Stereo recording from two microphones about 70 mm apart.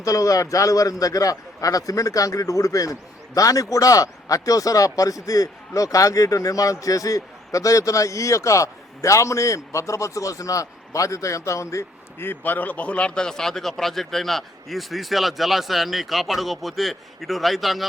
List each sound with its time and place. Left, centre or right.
0.0 s a man's voice: left
12.2 s speech: left; by 17.8 s centre